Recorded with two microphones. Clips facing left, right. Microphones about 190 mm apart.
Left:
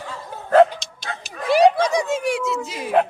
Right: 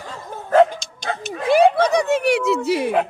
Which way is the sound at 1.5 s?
55° right (ahead or behind).